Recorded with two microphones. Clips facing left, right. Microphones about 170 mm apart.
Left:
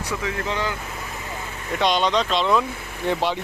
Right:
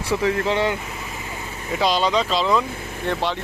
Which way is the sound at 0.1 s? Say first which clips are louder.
Right 7 dB; 35° right (ahead or behind).